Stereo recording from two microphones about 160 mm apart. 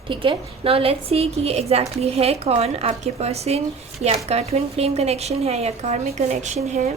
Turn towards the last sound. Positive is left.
turn(degrees=-45)  # may be behind; listen again after turning